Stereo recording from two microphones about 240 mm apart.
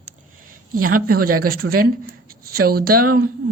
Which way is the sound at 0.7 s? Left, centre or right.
Right.